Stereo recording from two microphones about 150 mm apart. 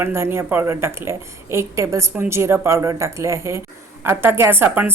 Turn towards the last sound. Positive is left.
turn(degrees=-15)  # may be behind; listen again after turning